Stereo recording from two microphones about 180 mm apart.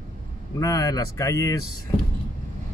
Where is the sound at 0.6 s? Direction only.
20° left (ahead or behind).